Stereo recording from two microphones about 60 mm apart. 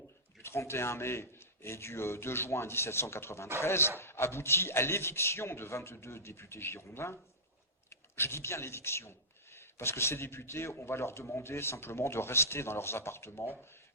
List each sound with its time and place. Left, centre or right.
0.4 s speech: left